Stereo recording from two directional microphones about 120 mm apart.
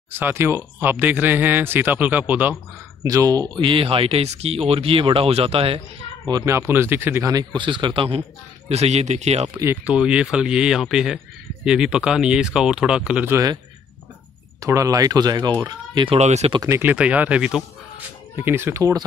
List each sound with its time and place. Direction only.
0.1 s speech: 20° right (ahead or behind)
3.0 s speech: 30° right (ahead or behind); by 5.8 s 50° right (ahead or behind)
6.2 s speech: 30° right (ahead or behind)
7.2 s speech: 35° right (ahead or behind)
8.6 s speech: 65° right (ahead or behind)
9.5 s speech: 20° right (ahead or behind)
9.9 s speech: 10° right (ahead or behind)
13.3 s speech: 30° right (ahead or behind)
14.6 s speech: 25° right (ahead or behind)
16.2 s speech: 65° right (ahead or behind)
16.6 s speech: 20° right (ahead or behind)
16.9 s speech: 10° right (ahead or behind)
18.3 s speech: 20° right (ahead or behind)